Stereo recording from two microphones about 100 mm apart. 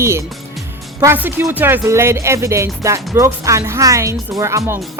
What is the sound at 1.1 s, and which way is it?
Speech, 25° right (ahead or behind).